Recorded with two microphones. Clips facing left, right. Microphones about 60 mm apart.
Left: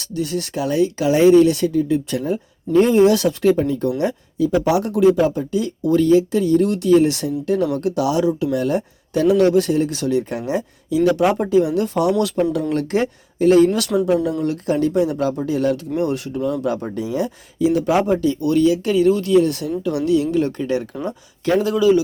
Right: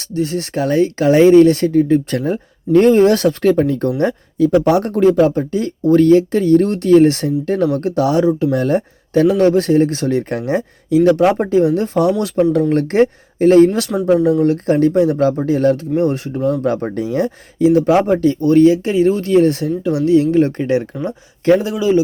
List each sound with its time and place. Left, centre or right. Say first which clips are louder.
0.0 s speech: right 4 dB; right
0.6 s speech: right 4 dB; right
13.9 s speech: left 1 dB; centre
14.4 s speech: right 6 dB; right
16.9 s speech: right 4 dB; right
21.6 s speech: even; right